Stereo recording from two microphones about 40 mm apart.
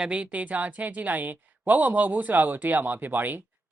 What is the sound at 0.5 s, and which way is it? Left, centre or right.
Speech, right.